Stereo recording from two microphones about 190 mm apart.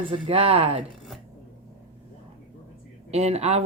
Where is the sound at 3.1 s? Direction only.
35° right (ahead or behind).